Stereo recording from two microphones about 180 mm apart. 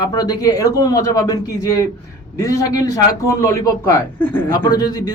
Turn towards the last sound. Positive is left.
turn(degrees=20)  # may be behind; listen again after turning